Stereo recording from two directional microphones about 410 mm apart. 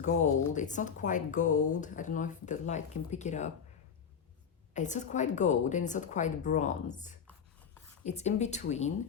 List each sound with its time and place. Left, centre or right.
0.0 s speech: centre
4.7 s speech: centre